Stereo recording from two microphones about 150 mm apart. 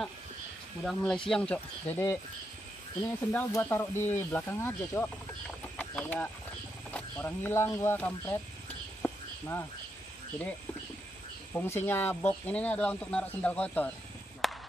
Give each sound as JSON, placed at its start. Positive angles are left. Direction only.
{"t": 0.8, "sound": "speech", "side_deg": 0}
{"t": 5.8, "sound": "chicken", "side_deg": 10}
{"t": 6.9, "sound": "speech", "side_deg": 10}
{"t": 9.0, "sound": "a sound", "side_deg": 15}
{"t": 11.8, "sound": "speech", "side_deg": 15}
{"t": 14.4, "sound": "a sound", "side_deg": 0}